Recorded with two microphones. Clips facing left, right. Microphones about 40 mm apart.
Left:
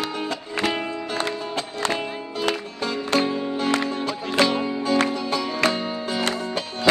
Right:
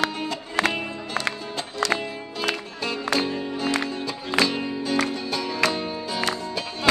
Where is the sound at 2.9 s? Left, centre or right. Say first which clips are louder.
Left 2 dB; left.